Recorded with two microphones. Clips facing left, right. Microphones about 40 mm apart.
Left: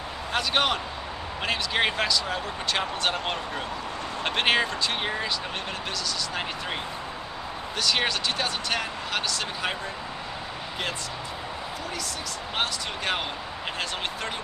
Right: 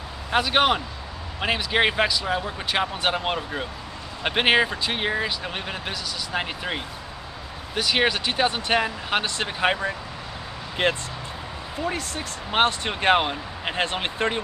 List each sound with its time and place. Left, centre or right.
0.3 s speech: centre; by 11.0 s right
12.5 s speech: right